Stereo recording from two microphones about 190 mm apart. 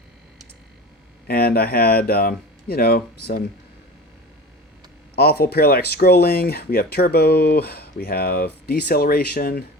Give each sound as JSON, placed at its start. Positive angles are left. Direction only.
{"t": 1.3, "sound": "speech", "side_deg": 55}
{"t": 5.1, "sound": "speech", "side_deg": 55}